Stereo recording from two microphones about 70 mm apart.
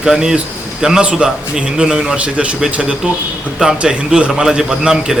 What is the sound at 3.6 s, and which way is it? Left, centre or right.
A man's voice, centre.